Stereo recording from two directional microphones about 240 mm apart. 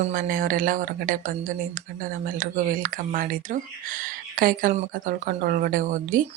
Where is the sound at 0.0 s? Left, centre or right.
Right.